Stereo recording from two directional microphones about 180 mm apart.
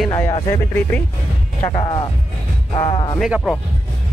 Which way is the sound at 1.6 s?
25° left (ahead or behind).